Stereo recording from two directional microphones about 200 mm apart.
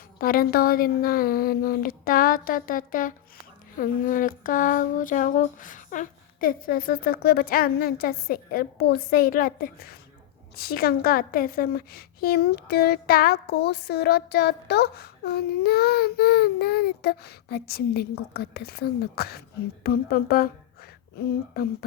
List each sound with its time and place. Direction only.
0.2 s a woman's voice: 45° left (ahead or behind)